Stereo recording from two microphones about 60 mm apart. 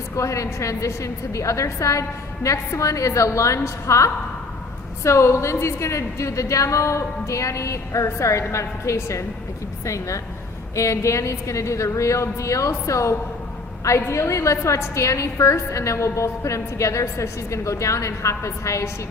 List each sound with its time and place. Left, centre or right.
0.2 s a woman's voice: left